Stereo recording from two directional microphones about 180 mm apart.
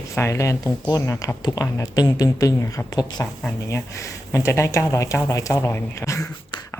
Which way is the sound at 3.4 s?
5° left (ahead or behind).